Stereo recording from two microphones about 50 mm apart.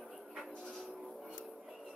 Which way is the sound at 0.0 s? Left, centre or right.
Centre.